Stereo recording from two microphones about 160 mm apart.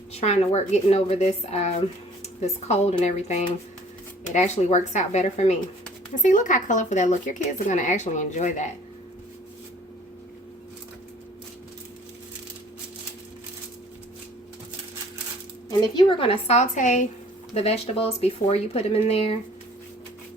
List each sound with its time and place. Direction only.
0.1 s speech: 40° left (ahead or behind)
16.0 s speech: 30° left (ahead or behind); by 17.1 s 50° left (ahead or behind)
17.5 s speech: 40° left (ahead or behind)